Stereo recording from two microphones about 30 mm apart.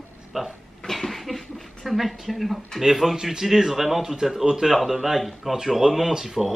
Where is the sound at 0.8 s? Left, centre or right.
Centre.